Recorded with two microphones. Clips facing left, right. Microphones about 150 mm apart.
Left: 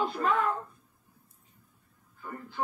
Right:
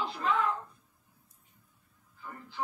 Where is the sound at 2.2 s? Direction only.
50° left (ahead or behind).